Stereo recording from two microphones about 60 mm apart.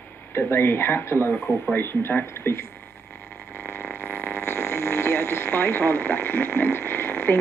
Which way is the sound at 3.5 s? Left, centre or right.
Left.